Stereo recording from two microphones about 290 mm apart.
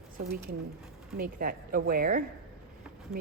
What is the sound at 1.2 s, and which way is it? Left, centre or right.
A woman's voice, right.